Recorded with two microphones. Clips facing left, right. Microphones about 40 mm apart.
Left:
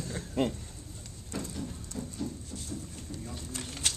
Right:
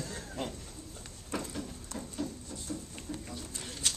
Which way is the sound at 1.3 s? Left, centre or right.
Right.